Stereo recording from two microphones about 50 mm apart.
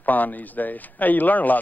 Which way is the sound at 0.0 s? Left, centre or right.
Left.